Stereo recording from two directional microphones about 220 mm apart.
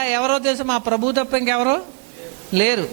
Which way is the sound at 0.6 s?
25° right (ahead or behind).